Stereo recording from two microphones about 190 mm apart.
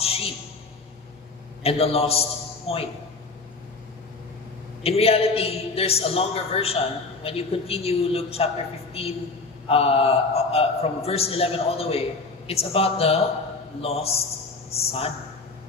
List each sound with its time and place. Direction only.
0.0 s a sound: 30° left (ahead or behind)
1.6 s a man's voice: 30° left (ahead or behind)
4.8 s a man's voice: 30° left (ahead or behind)